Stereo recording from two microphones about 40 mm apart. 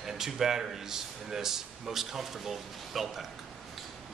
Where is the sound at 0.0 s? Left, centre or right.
Centre.